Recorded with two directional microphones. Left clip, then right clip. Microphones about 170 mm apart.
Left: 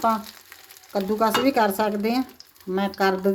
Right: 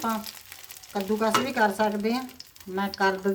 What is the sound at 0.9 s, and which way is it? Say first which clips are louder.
Speech: left 3 dB; 55° left (ahead or behind).